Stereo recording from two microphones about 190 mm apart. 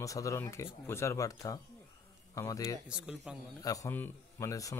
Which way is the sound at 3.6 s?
15° left (ahead or behind).